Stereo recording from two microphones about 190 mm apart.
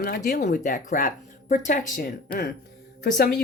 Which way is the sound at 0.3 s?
45° left (ahead or behind).